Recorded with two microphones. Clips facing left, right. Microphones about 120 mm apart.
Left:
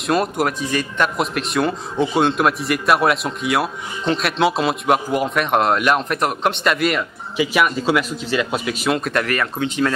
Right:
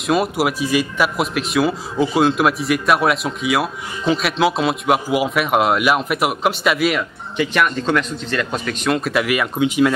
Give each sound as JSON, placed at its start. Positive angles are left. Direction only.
{"t": 0.0, "sound": "speech", "side_deg": 0}